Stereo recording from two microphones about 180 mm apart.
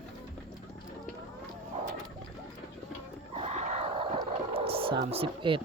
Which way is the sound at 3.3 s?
35° right (ahead or behind).